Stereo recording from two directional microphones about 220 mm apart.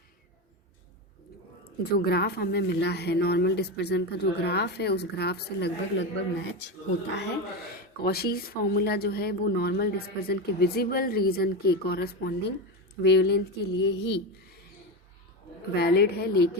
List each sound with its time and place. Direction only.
1.9 s speech: 45° left (ahead or behind)
8.0 s speech: 45° left (ahead or behind)
15.7 s speech: 45° left (ahead or behind)